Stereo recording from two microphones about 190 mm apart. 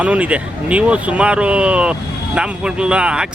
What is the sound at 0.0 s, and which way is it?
A man's voice, 5° right (ahead or behind).